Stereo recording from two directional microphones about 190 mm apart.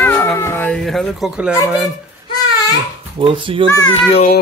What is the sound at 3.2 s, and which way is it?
Speech, 25° right (ahead or behind).